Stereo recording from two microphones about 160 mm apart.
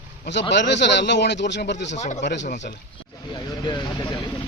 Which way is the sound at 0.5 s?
90° left.